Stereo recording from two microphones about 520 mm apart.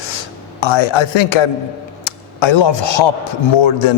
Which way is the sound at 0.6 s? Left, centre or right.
Left.